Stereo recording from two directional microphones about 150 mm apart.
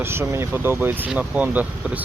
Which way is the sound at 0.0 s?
15° right (ahead or behind).